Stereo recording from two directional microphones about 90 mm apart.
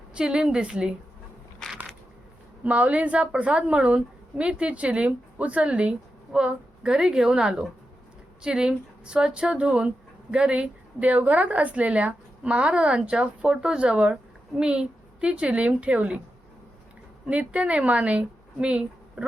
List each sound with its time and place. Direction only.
0.1 s a woman's voice: 10° right (ahead or behind)
1.6 s a sound: 5° left (ahead or behind)
2.6 s a woman's voice: 15° right (ahead or behind)
17.2 s a woman's voice: 15° right (ahead or behind)